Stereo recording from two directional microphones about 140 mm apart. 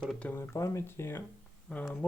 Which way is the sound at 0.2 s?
10° left (ahead or behind).